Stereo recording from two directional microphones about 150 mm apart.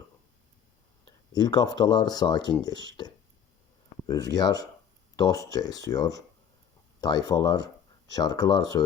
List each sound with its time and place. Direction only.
1.3 s speech: 25° left (ahead or behind)